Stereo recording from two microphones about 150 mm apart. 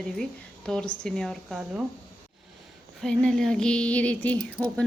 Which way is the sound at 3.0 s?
5° left (ahead or behind).